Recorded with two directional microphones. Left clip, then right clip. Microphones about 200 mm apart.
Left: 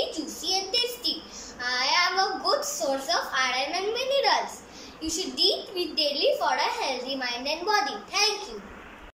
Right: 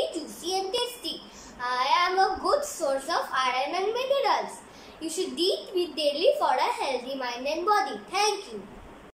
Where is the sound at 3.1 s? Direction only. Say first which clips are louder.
Left 1 dB; 15° right (ahead or behind).